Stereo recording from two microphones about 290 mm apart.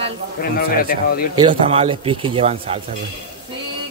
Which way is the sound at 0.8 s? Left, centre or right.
Left.